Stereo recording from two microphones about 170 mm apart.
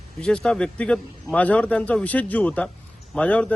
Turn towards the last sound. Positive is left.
turn(degrees=5)  # may be behind; listen again after turning